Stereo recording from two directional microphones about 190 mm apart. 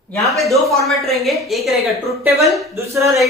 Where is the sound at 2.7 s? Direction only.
15° right (ahead or behind).